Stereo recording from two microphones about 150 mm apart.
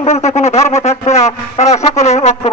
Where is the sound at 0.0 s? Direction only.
45° left (ahead or behind).